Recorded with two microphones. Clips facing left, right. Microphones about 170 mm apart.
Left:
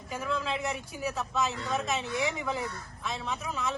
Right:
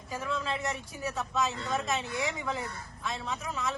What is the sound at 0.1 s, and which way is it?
Speech, centre (ahead or behind).